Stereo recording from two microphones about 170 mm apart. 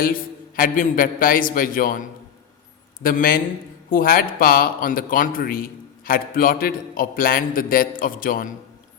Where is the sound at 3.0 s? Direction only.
55° left (ahead or behind).